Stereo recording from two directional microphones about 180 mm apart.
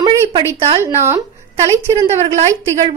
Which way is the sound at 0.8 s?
15° right (ahead or behind).